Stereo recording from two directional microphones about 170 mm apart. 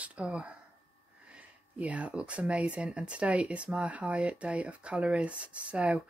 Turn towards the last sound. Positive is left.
turn(degrees=-5)  # may be behind; listen again after turning